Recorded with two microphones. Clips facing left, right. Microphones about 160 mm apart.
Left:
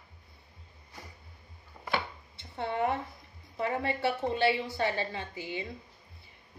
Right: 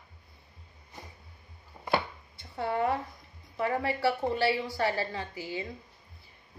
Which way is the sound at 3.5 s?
20° left (ahead or behind).